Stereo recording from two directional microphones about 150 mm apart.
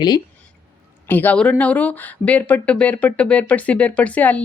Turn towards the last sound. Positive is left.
turn(degrees=10)  # may be behind; listen again after turning